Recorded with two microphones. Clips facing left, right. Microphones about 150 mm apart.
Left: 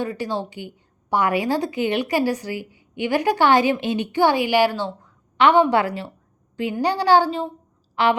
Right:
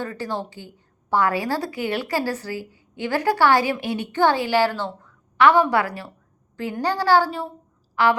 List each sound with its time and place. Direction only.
0.0 s a woman's voice: 15° left (ahead or behind)